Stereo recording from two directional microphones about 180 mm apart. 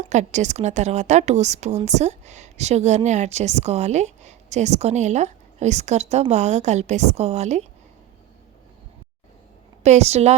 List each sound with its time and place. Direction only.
0.0 s a woman's voice: 40° right (ahead or behind)
9.8 s a woman's voice: 35° right (ahead or behind)